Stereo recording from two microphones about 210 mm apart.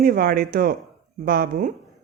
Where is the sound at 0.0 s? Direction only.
45° right (ahead or behind).